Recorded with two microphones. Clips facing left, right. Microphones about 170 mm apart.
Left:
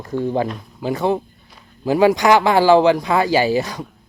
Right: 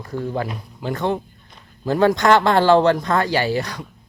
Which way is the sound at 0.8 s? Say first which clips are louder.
Left 3 dB; 10° left (ahead or behind).